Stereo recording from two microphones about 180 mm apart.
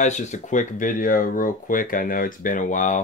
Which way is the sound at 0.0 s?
40° left (ahead or behind).